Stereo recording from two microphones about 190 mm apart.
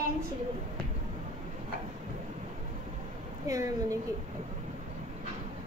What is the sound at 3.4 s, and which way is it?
Speech, 15° right (ahead or behind).